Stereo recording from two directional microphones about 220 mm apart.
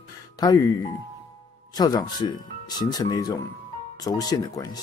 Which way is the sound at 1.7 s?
15° left (ahead or behind).